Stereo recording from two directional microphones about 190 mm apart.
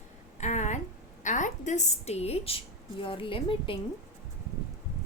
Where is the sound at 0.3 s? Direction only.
40° left (ahead or behind).